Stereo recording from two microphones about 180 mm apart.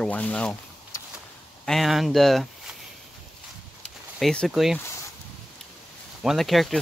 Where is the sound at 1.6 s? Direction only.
Centre (ahead or behind).